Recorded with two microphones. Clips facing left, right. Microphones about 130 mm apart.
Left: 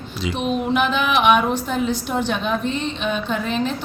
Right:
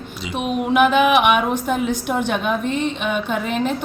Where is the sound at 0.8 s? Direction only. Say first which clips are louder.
Right 10 dB; 55° right (ahead or behind).